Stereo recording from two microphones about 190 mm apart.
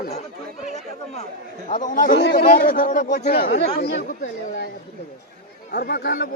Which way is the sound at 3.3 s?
60° left (ahead or behind).